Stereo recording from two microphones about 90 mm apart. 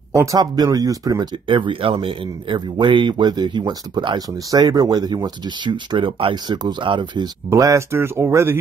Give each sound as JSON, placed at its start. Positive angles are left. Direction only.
{"t": 0.1, "sound": "speech", "side_deg": -35}
{"t": 1.5, "sound": "speech", "side_deg": -75}
{"t": 4.5, "sound": "speech", "side_deg": -45}
{"t": 6.3, "sound": "speech", "side_deg": -55}
{"t": 7.4, "sound": "speech", "side_deg": -35}